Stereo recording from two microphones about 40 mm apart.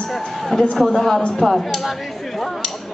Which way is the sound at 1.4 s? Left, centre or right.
Centre.